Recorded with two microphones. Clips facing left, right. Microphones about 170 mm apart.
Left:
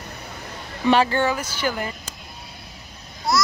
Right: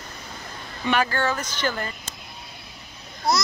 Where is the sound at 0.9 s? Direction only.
30° left (ahead or behind).